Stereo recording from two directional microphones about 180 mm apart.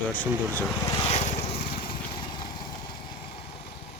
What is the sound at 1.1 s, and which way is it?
Vehicle, 35° left (ahead or behind).